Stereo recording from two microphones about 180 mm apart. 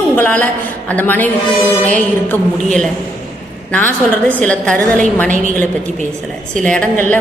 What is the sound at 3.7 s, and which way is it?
A woman's voice, 10° left (ahead or behind).